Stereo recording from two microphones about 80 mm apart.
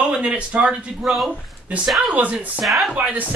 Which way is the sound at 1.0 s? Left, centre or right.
Centre.